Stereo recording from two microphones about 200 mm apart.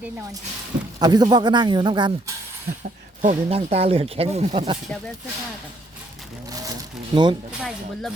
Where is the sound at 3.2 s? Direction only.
35° right (ahead or behind).